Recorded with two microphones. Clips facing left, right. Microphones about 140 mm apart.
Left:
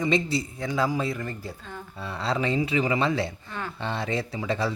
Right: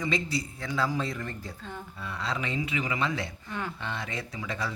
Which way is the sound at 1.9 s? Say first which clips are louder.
Left 6 dB; 30° left (ahead or behind).